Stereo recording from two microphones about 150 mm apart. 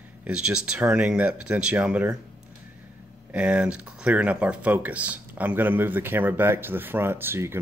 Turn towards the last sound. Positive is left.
turn(degrees=-15)  # may be behind; listen again after turning